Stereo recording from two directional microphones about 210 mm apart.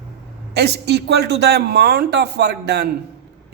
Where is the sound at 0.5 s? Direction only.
50° right (ahead or behind).